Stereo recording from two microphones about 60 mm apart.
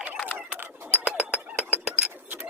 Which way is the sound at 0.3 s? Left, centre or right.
Right.